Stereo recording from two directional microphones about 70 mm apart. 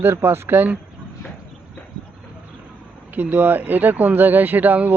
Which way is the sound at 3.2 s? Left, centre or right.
Right.